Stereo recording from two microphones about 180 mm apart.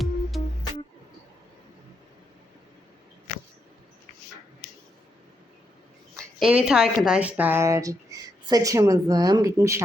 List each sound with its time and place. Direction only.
0.0 s music: centre (ahead or behind)
6.1 s a sound: centre (ahead or behind)
6.7 s a woman's voice: 5° right (ahead or behind)